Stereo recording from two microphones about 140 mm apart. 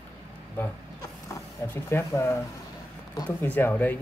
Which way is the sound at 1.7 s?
20° left (ahead or behind).